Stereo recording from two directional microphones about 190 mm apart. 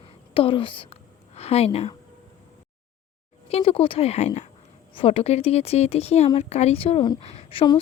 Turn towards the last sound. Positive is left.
turn(degrees=25)  # may be behind; listen again after turning